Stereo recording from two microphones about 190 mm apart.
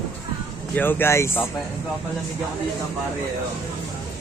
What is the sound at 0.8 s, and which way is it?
Speech, 10° left (ahead or behind).